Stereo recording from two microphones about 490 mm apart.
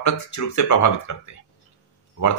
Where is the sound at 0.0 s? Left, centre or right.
Left.